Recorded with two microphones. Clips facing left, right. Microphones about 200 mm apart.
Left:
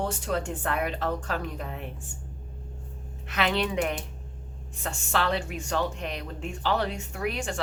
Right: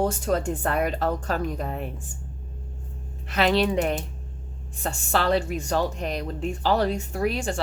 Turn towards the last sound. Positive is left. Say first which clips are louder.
# right 5 dB
turn(degrees=-30)  # may be behind; listen again after turning